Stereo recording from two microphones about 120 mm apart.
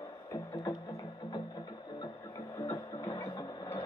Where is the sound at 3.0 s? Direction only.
30° left (ahead or behind).